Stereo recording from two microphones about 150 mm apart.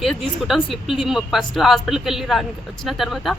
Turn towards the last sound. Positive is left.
turn(degrees=0)  # may be behind; listen again after turning